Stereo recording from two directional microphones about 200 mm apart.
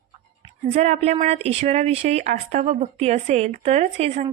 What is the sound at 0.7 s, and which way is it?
Speech, 35° right (ahead or behind).